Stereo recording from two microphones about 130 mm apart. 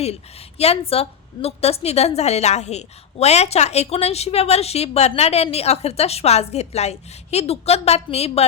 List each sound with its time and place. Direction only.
0.6 s a woman's voice: 50° left (ahead or behind)